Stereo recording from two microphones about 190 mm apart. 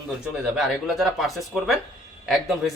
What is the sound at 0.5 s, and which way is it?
Speech, centre (ahead or behind).